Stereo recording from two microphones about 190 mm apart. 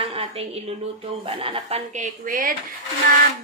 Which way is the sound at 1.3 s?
30° right (ahead or behind).